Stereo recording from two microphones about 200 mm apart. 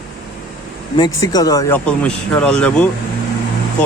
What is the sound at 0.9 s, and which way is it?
Speech, 20° left (ahead or behind).